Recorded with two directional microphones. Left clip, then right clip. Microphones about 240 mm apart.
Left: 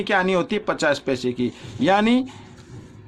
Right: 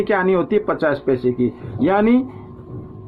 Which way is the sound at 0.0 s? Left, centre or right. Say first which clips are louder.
Right 3 dB; left.